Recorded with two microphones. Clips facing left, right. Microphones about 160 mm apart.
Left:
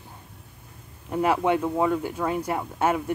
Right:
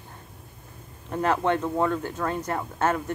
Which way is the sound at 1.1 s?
10° left (ahead or behind).